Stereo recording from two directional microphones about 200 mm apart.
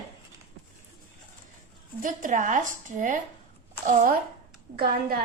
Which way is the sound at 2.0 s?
40° right (ahead or behind).